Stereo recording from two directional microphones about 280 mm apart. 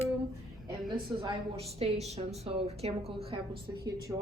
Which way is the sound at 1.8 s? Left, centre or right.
Right.